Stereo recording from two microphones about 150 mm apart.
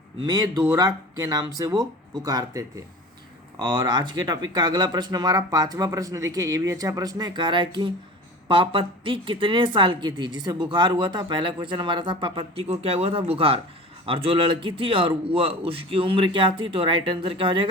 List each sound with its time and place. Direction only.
0.2 s a woman's voice: 25° right (ahead or behind)